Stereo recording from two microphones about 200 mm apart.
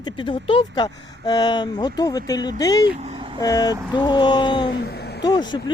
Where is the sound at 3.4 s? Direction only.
20° left (ahead or behind).